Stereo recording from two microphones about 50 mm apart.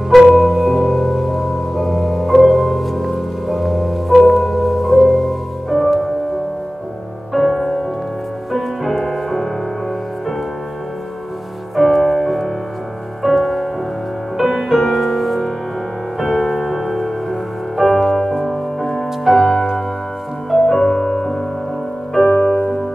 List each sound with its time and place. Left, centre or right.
0.3 s music: centre
7.3 s music: centre
11.7 s music: centre
20.5 s music: centre
22.2 s music: left